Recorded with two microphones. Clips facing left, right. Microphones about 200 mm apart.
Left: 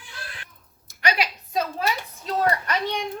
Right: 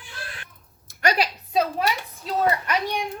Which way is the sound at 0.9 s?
45° right (ahead or behind).